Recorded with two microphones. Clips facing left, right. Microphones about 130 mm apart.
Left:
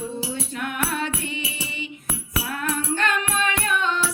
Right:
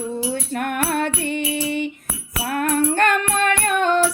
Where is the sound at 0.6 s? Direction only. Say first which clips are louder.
Right 5 dB; 55° right (ahead or behind).